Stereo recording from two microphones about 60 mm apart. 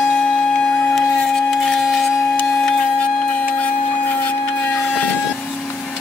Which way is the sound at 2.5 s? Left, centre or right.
Centre.